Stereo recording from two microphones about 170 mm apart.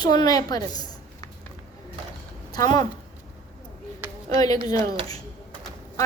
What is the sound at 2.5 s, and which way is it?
Speech, 25° left (ahead or behind).